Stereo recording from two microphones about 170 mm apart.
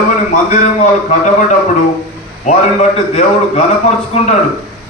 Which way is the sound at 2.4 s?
40° left (ahead or behind).